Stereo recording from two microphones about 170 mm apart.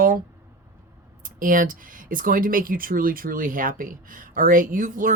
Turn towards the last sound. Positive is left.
turn(degrees=-55)  # may be behind; listen again after turning